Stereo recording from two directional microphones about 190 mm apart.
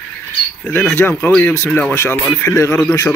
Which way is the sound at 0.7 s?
10° left (ahead or behind).